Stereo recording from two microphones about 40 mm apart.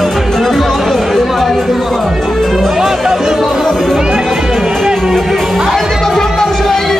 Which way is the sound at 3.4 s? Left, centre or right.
Centre.